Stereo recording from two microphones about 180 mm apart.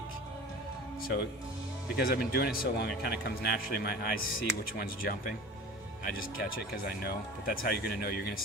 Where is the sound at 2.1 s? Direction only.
55° left (ahead or behind).